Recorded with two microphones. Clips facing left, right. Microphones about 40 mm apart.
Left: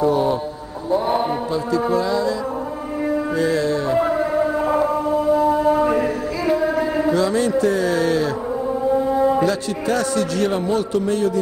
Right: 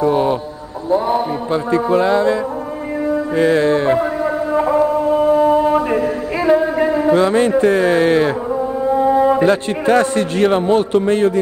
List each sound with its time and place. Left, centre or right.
0.0 s a sound: right
1.5 s music: right
3.3 s music: right
4.0 s a sound: centre
5.1 s music: right
6.9 s a man's voice: right